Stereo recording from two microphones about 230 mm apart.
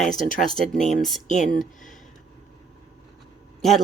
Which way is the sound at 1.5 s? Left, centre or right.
Centre.